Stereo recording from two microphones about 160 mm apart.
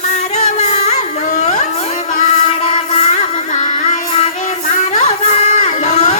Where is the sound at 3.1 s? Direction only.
45° left (ahead or behind).